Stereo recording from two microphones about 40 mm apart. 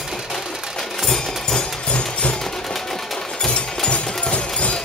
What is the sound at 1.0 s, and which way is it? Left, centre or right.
Music, centre.